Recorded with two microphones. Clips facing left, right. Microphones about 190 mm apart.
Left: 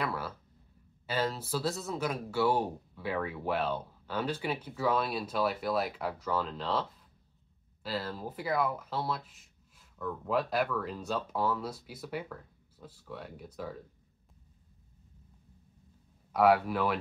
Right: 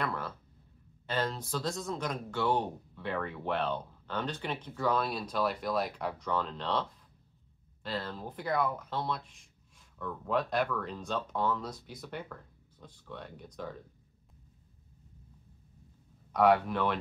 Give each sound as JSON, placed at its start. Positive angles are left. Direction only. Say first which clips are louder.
{"t": 0.0, "sound": "a sound", "louder": "left 1 dB", "side_deg": 5}
{"t": 1.0, "sound": "speech", "louder": "left 1 dB", "side_deg": 5}
{"t": 16.3, "sound": "speech", "louder": "even", "side_deg": 5}